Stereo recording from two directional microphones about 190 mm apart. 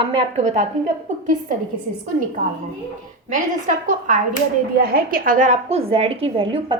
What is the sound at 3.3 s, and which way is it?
A woman's voice, 45° right (ahead or behind).